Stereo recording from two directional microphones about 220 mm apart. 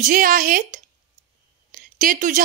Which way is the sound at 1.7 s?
40° right (ahead or behind).